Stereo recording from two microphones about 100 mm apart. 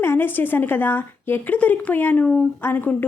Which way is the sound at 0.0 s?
20° left (ahead or behind).